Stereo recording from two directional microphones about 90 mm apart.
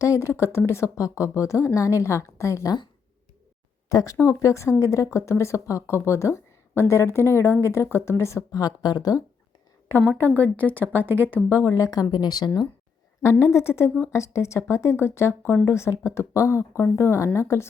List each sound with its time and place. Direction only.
0.0 s speech: 35° left (ahead or behind)
3.8 s speech: 40° left (ahead or behind)
10.2 s speech: 25° right (ahead or behind)
10.4 s speech: 20° left (ahead or behind)
11.3 s speech: 25° right (ahead or behind)
11.7 s speech: 40° left (ahead or behind)
13.4 s speech: 30° left (ahead or behind)